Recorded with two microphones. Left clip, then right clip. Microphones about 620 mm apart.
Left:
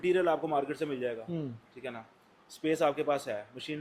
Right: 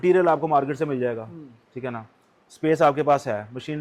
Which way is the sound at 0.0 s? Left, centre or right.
Right.